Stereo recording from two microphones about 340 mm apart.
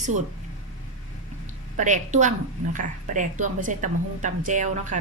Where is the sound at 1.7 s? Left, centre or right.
Right.